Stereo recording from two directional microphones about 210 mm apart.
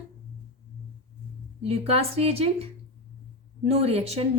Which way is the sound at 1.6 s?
30° right (ahead or behind).